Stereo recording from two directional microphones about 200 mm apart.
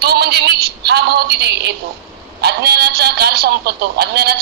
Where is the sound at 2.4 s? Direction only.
55° right (ahead or behind).